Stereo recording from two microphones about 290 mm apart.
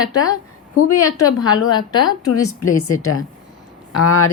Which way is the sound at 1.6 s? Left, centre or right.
Centre.